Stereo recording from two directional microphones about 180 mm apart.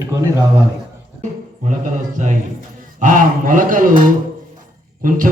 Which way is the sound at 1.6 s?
45° right (ahead or behind).